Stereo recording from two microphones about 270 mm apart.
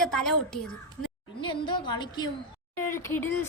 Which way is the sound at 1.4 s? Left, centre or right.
Centre.